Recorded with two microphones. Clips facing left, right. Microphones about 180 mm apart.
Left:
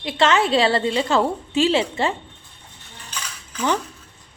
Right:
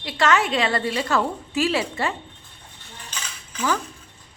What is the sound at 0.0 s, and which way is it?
A woman's voice, 25° left (ahead or behind).